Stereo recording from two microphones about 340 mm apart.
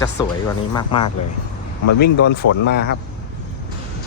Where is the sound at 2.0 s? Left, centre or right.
Left.